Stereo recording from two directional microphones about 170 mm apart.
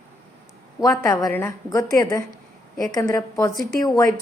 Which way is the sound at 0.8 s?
20° left (ahead or behind).